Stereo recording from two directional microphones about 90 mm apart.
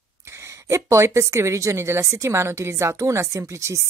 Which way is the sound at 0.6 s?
30° right (ahead or behind).